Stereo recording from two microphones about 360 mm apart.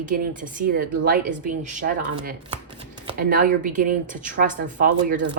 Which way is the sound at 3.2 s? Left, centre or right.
Right.